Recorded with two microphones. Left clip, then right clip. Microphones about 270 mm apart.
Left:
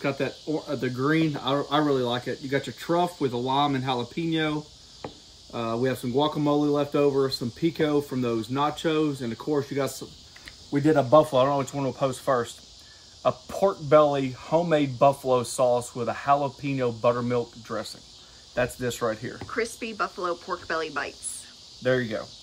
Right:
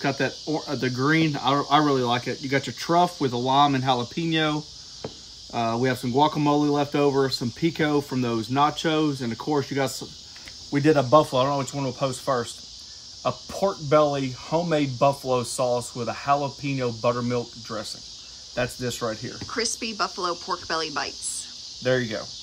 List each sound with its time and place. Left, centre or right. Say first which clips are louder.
0.0 s speech: right 3 dB; right
10.7 s speech: right 1 dB; centre